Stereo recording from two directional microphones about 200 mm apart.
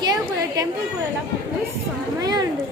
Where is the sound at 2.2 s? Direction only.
20° right (ahead or behind).